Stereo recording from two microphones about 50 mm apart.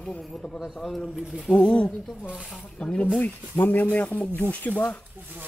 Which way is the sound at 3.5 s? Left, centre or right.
Left.